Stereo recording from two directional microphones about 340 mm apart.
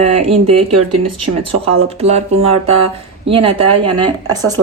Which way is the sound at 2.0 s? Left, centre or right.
Centre.